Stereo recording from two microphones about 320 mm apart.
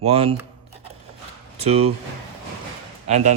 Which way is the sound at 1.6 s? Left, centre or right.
Centre.